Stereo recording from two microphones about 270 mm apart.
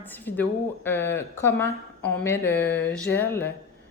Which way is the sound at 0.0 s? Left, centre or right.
Centre.